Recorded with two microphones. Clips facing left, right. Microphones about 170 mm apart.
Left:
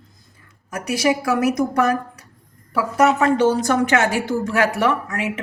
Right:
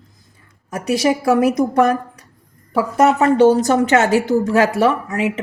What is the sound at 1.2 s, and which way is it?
Speech, 25° right (ahead or behind).